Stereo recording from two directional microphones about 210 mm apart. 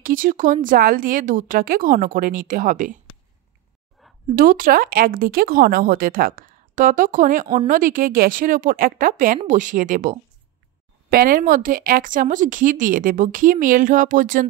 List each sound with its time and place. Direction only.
0.0 s speech: 40° right (ahead or behind)
4.4 s speech: 40° right (ahead or behind)